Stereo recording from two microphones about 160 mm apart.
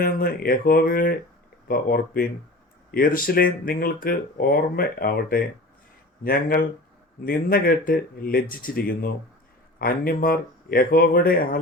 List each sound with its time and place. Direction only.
0.0 s speech: 65° left (ahead or behind)